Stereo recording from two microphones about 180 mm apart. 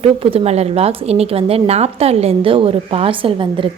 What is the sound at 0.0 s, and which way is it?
Speech, 30° right (ahead or behind).